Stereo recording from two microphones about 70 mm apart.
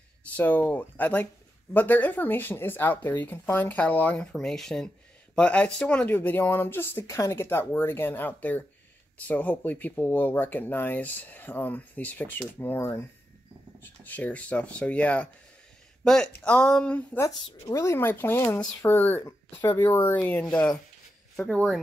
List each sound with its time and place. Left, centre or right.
0.4 s speech: left
4.3 s speech: centre; by 7.2 s left
7.2 s speech: left
7.4 s speech: left; by 17.0 s centre
17.7 s speech: left; by 20.8 s centre
21.4 s speech: centre